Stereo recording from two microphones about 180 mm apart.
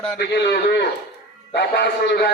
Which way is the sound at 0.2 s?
70° left (ahead or behind).